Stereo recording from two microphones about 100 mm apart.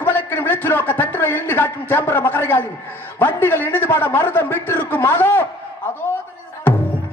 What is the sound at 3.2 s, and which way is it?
A man's voice, 20° left (ahead or behind).